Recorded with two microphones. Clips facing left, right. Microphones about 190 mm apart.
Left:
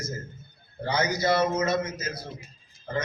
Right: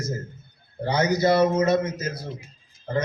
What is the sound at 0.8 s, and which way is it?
Speech, 30° right (ahead or behind).